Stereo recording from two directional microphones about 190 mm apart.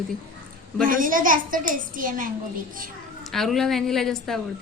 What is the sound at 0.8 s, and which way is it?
A woman's voice, 45° right (ahead or behind).